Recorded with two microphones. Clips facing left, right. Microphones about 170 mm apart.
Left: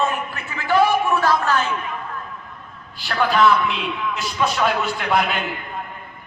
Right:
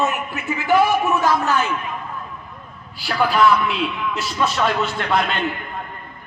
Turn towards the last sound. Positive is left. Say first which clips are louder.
# even
turn(degrees=5)  # may be behind; listen again after turning